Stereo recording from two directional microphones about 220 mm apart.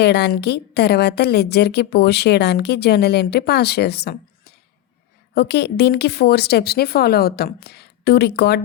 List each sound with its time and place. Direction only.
0.0 s a woman's voice: 50° left (ahead or behind)